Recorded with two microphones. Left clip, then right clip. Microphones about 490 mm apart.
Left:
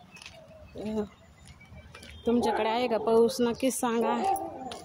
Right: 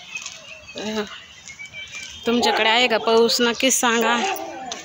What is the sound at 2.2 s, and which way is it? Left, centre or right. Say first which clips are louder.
Speech: right 8 dB; left.